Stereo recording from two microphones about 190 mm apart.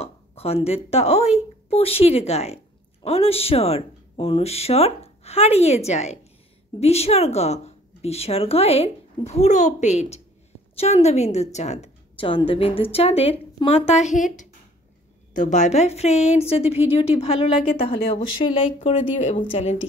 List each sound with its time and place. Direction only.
0.0 s a woman's voice: 30° left (ahead or behind)